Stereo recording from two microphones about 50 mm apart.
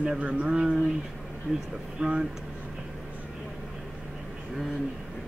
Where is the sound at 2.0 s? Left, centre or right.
Centre.